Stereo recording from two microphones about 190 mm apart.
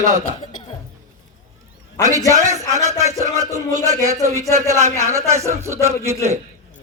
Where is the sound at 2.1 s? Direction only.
15° right (ahead or behind).